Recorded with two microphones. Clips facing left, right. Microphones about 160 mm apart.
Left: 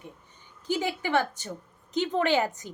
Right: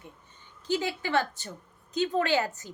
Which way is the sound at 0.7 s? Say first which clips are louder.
Left 1 dB; 15° left (ahead or behind).